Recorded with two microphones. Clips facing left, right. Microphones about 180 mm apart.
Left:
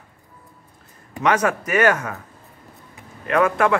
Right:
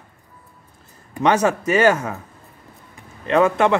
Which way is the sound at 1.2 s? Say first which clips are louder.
Right 2 dB; 25° right (ahead or behind).